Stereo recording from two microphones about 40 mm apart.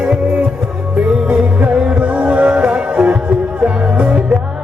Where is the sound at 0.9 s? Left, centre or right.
Right.